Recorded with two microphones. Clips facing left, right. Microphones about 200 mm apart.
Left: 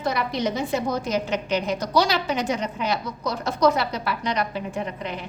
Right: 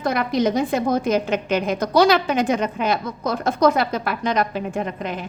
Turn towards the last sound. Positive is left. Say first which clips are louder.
# right 4 dB
turn(degrees=-50)  # may be behind; listen again after turning